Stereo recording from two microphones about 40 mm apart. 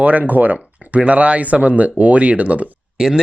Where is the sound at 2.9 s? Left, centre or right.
Centre.